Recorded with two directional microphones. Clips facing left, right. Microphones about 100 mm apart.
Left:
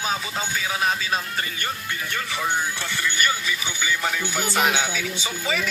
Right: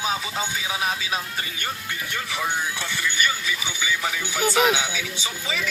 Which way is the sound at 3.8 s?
10° right (ahead or behind).